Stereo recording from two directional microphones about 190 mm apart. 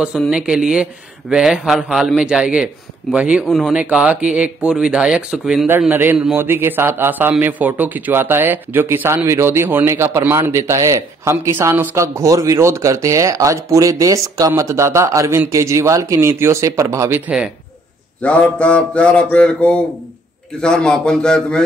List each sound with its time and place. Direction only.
0.0 s a man's voice: 5° right (ahead or behind)
18.2 s a man's voice: 5° left (ahead or behind)